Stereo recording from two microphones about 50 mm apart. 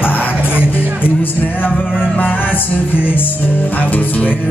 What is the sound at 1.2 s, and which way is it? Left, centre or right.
Music, left.